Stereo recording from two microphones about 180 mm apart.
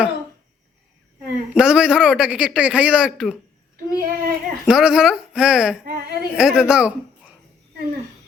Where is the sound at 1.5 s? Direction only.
5° right (ahead or behind).